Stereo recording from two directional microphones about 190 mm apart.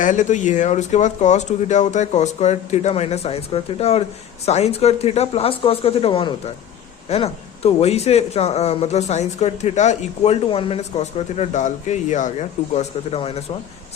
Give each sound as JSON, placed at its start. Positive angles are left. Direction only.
{"t": 0.0, "sound": "speech", "side_deg": 40}